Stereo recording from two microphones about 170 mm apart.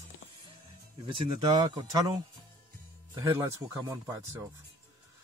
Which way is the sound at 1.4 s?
25° right (ahead or behind).